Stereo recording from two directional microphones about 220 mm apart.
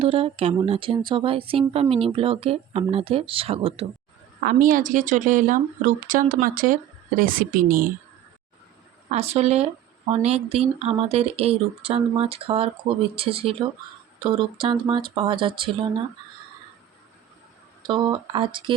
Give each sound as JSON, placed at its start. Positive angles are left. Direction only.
{"t": 0.0, "sound": "speech", "side_deg": -25}
{"t": 4.4, "sound": "speech", "side_deg": -35}
{"t": 9.0, "sound": "speech", "side_deg": -30}
{"t": 17.8, "sound": "speech", "side_deg": -20}